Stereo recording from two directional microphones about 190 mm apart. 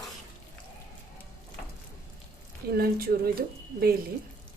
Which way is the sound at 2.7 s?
55° right (ahead or behind).